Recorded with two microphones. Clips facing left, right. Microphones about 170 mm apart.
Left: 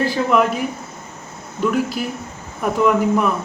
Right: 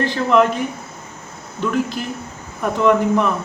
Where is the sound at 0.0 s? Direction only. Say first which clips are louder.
Right 1 dB; 5° left (ahead or behind).